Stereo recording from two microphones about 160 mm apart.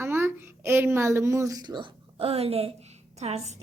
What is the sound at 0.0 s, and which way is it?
A woman's voice, 15° right (ahead or behind).